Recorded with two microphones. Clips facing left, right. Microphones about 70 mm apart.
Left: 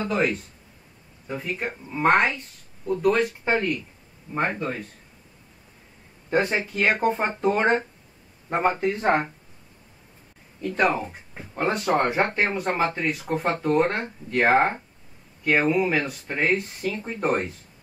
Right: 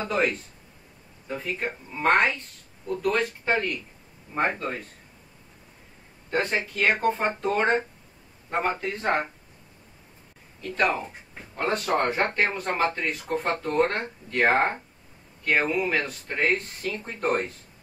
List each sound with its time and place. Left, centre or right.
0.0 s speech: centre
6.3 s speech: centre
11.0 s speech: centre